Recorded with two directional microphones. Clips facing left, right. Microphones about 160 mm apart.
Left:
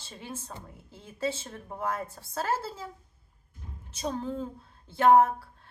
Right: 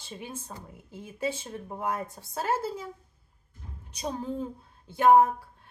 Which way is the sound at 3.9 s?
15° right (ahead or behind).